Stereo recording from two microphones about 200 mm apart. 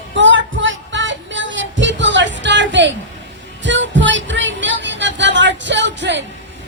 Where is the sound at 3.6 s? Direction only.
65° right (ahead or behind).